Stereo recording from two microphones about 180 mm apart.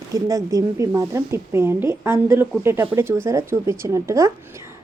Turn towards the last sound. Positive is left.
turn(degrees=-15)  # may be behind; listen again after turning